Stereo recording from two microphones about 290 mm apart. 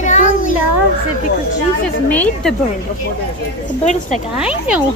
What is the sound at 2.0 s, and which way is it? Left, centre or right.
Speech, centre.